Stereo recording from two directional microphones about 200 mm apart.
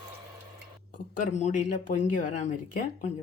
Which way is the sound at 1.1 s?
40° left (ahead or behind).